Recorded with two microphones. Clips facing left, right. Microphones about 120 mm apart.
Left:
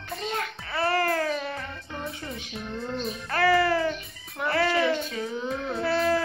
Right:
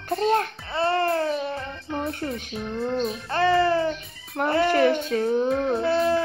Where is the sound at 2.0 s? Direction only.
60° right (ahead or behind).